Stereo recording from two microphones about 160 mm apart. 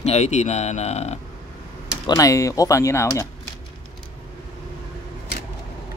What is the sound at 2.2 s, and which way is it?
Speech, 20° left (ahead or behind).